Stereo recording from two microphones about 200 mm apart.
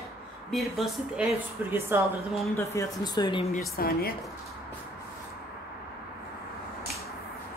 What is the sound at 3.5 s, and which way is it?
Speech, 45° left (ahead or behind).